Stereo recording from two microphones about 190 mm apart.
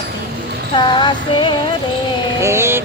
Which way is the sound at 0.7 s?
25° left (ahead or behind).